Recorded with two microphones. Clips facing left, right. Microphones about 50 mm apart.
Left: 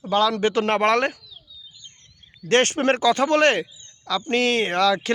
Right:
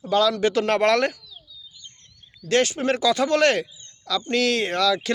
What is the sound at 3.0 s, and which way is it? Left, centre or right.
Speech, left.